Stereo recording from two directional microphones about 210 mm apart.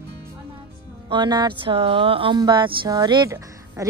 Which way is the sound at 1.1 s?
20° right (ahead or behind).